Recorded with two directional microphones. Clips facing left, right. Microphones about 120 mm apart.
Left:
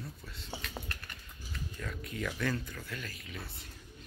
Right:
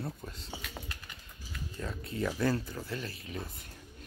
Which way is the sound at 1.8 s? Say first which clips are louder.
Right 5 dB; 30° right (ahead or behind).